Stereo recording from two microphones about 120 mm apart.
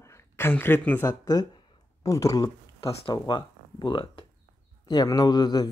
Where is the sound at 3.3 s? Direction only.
40° left (ahead or behind).